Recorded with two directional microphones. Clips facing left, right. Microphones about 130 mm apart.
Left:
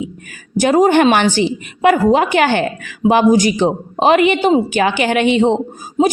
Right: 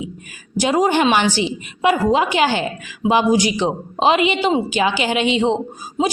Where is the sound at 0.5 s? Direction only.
50° left (ahead or behind).